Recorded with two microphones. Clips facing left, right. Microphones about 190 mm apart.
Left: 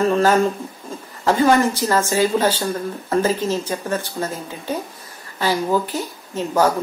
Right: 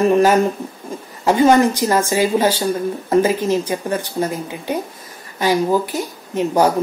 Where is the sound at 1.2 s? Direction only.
15° right (ahead or behind).